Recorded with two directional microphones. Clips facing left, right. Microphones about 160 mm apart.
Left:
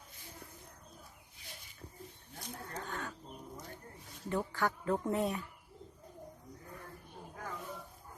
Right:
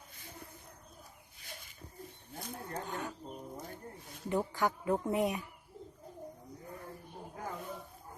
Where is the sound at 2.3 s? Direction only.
55° right (ahead or behind).